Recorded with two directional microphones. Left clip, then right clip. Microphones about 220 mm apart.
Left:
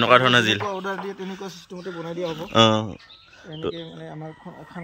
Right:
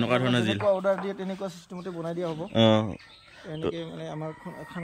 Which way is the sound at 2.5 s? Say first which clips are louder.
Left 5 dB; 5° right (ahead or behind).